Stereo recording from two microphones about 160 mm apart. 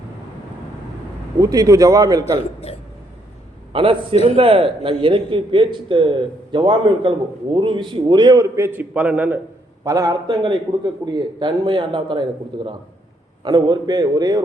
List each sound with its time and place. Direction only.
1.4 s a man's voice: 20° right (ahead or behind)
2.6 s speech: 40° left (ahead or behind)
3.7 s a man's voice: 35° right (ahead or behind); by 9.4 s 10° right (ahead or behind)
9.8 s a man's voice: 20° right (ahead or behind)